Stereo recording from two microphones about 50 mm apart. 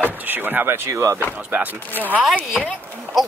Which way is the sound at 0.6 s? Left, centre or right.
Right.